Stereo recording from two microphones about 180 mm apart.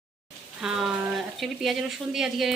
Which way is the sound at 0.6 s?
Centre (ahead or behind).